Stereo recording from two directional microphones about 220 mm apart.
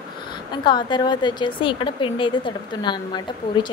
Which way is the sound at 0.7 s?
20° left (ahead or behind).